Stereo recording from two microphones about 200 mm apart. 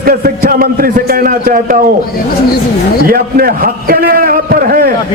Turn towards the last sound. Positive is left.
turn(degrees=-50)  # may be behind; listen again after turning